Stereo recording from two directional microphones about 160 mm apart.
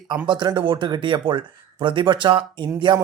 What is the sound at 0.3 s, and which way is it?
Speech, 30° right (ahead or behind).